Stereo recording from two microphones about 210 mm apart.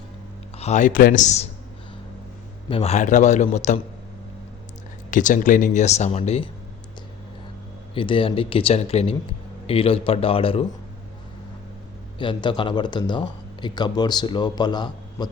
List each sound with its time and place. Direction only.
0.6 s speech: 35° left (ahead or behind)
2.6 s speech: 30° left (ahead or behind)
5.1 s speech: 40° left (ahead or behind)
7.9 s speech: 25° left (ahead or behind)
12.2 s speech: 25° left (ahead or behind)